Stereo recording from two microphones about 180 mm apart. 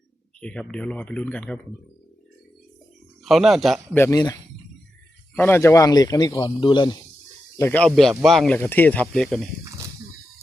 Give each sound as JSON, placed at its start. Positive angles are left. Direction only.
{"t": 0.3, "sound": "speech", "side_deg": 5}
{"t": 3.2, "sound": "speech", "side_deg": 0}
{"t": 3.9, "sound": "speech", "side_deg": 15}
{"t": 7.5, "sound": "speech", "side_deg": 10}